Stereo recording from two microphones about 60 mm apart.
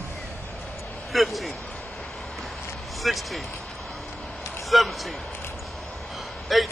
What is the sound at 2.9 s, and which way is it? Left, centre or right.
Speech, centre.